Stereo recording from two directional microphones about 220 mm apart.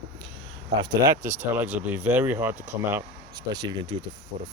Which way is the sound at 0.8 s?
10° right (ahead or behind).